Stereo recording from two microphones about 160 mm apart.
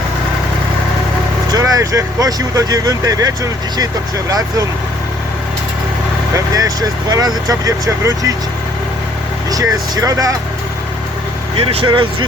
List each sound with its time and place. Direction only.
1.5 s speech: 20° right (ahead or behind)
6.3 s speech: 20° right (ahead or behind)
9.5 s speech: 20° right (ahead or behind)
11.5 s speech: 35° right (ahead or behind)